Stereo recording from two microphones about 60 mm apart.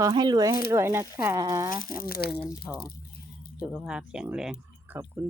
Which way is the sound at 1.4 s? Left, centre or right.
Right.